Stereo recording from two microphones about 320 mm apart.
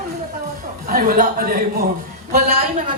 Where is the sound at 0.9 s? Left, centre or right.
Right.